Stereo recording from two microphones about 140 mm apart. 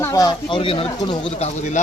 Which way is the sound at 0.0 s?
25° left (ahead or behind).